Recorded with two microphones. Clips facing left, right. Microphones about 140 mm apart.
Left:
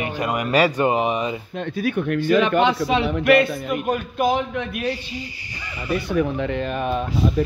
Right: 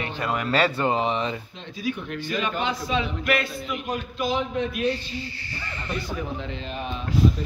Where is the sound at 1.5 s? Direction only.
60° left (ahead or behind).